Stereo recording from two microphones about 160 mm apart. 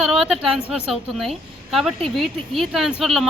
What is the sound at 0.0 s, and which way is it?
A woman's voice, 5° right (ahead or behind).